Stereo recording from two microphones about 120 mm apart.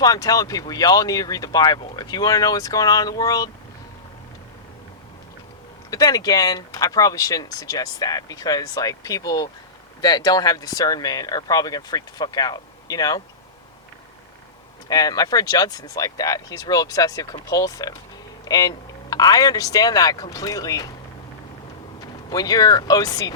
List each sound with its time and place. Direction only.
0.0 s speech: 30° left (ahead or behind)
5.9 s speech: 30° left (ahead or behind)
14.8 s speech: 30° left (ahead or behind)
22.0 s speech: 30° left (ahead or behind)